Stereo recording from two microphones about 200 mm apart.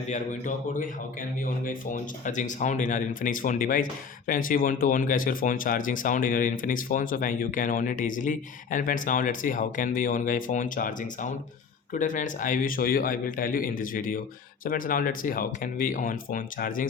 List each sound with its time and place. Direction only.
0.1 s speech: 40° left (ahead or behind)